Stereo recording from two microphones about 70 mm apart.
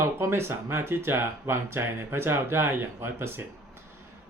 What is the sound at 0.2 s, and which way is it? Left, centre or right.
Speech, right.